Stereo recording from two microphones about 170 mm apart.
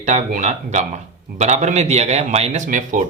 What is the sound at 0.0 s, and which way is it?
Speech, 45° right (ahead or behind).